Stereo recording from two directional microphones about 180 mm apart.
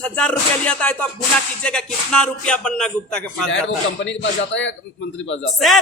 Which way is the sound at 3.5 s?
80° left.